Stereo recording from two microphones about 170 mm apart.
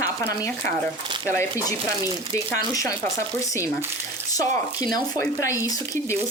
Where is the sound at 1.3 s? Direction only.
15° left (ahead or behind).